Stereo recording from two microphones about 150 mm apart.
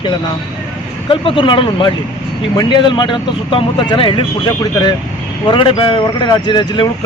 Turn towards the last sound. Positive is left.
turn(degrees=30)  # may be behind; listen again after turning